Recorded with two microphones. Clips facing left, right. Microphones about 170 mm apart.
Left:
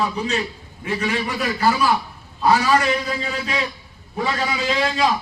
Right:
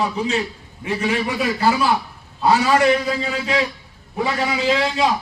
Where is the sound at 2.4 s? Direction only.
20° right (ahead or behind).